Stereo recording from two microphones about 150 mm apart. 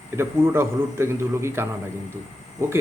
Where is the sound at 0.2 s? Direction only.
15° right (ahead or behind).